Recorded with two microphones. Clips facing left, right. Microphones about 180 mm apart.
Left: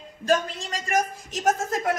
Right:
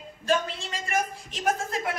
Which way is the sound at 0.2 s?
45° left (ahead or behind).